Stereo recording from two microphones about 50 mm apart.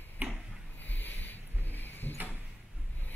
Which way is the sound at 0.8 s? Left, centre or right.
Left.